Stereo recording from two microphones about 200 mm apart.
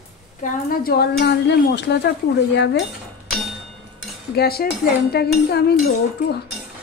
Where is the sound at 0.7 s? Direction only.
50° left (ahead or behind).